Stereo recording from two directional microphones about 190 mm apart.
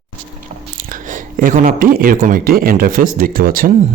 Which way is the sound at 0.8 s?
45° right (ahead or behind).